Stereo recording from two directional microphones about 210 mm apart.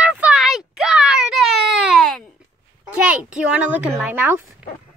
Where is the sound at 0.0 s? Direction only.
5° right (ahead or behind).